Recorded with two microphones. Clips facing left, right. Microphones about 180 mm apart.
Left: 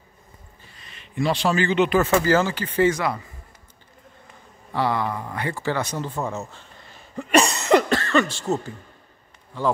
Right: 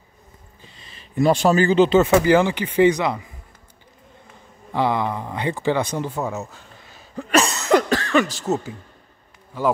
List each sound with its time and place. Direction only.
0.7 s speech: 40° right (ahead or behind); by 3.3 s 15° right (ahead or behind)
4.7 s a man's voice: 15° right (ahead or behind)
6.2 s cough: centre (ahead or behind)
8.4 s speech: centre (ahead or behind)